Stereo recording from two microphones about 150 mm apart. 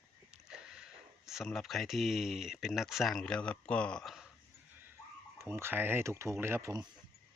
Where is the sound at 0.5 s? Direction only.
5° right (ahead or behind).